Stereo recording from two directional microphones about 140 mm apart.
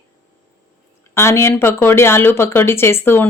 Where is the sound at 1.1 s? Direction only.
20° left (ahead or behind).